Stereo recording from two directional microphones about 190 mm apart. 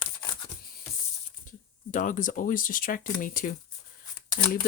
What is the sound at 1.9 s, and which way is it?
Speech, 45° left (ahead or behind).